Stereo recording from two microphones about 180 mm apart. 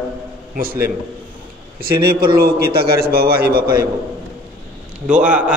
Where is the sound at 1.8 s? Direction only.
55° right (ahead or behind).